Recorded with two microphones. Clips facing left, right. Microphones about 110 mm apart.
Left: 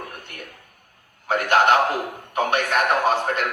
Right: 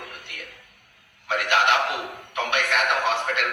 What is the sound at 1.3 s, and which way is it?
A man's voice, 45° left (ahead or behind).